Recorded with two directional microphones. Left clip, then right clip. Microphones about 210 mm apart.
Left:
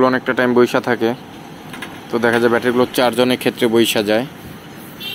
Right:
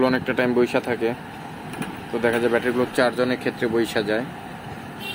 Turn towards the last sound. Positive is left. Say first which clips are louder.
# left 7 dB
turn(degrees=20)  # may be behind; listen again after turning